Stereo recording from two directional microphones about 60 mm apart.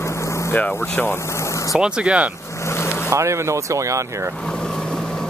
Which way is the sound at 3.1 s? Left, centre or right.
Right.